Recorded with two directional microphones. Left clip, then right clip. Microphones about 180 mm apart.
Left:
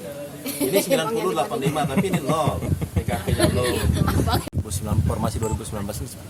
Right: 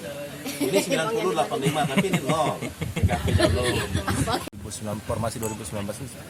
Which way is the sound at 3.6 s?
35° left (ahead or behind).